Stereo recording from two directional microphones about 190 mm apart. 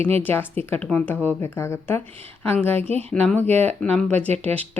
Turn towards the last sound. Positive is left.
turn(degrees=10)  # may be behind; listen again after turning